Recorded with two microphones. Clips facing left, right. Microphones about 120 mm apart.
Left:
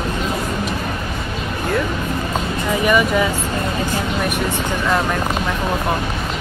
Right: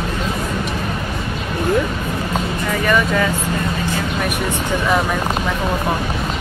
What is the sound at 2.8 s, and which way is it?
Speech, 15° left (ahead or behind).